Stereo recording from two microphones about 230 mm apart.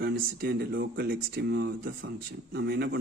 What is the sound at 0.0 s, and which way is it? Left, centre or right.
Speech, right.